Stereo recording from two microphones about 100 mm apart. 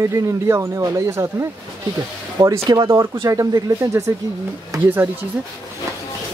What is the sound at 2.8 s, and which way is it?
Speech, 30° right (ahead or behind).